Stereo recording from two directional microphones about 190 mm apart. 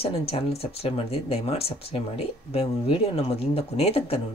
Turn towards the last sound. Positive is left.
turn(degrees=30)  # may be behind; listen again after turning